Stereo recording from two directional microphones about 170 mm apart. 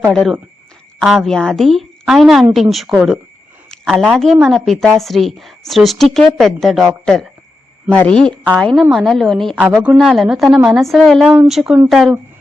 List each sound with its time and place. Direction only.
0.1 s a woman's voice: 5° left (ahead or behind)